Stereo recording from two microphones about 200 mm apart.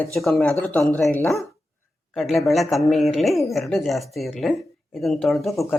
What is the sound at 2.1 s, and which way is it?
Speech, centre (ahead or behind).